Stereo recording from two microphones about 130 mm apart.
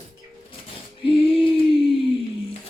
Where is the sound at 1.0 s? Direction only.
45° left (ahead or behind).